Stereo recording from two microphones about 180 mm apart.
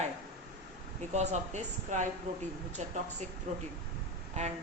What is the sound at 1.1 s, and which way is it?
Speech, 40° right (ahead or behind).